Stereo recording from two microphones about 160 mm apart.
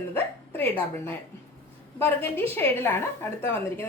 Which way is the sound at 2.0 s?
15° left (ahead or behind).